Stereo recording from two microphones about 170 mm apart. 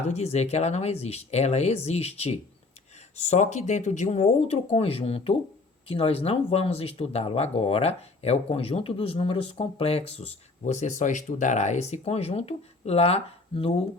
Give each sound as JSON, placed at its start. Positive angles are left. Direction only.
{"t": 0.0, "sound": "speech", "side_deg": 40}